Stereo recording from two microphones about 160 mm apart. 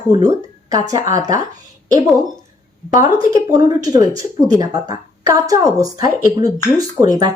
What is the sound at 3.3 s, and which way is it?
Speech, 25° right (ahead or behind).